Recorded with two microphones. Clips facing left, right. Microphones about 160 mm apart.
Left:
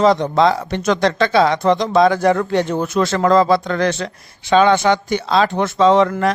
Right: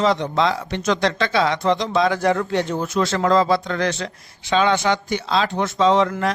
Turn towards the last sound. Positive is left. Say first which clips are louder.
# left 4 dB
turn(degrees=55)  # may be behind; listen again after turning